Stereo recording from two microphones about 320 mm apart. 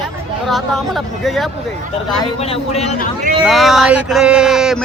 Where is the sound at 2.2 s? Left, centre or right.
Centre.